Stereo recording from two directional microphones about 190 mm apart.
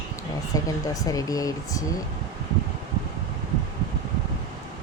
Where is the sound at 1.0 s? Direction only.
20° left (ahead or behind).